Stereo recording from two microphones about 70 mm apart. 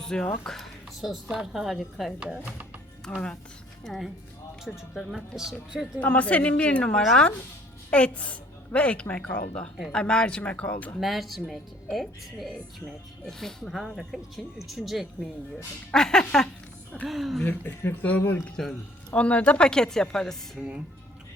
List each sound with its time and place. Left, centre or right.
0.0 s speech: centre
0.4 s a sound: centre
1.3 s speech: centre
2.1 s speech: centre
3.1 s a woman's voice: left
3.8 s speech: centre
6.0 s a woman's voice: left
11.0 s speech: centre
15.9 s a woman's voice: centre
17.1 s speech: centre
17.4 s a woman's voice: left
18.4 s a woman's voice: centre
19.1 s a woman's voice: centre
20.6 s speech: centre